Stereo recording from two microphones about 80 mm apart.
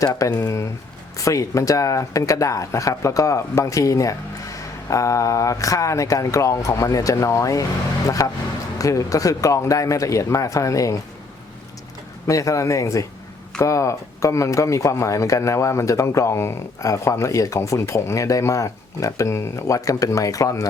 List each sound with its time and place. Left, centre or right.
0.0 s speech: left
12.3 s speech: left